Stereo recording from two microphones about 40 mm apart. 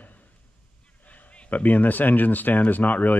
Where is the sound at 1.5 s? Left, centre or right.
Left.